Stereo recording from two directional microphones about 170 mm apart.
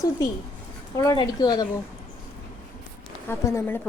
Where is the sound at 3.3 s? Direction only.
15° left (ahead or behind).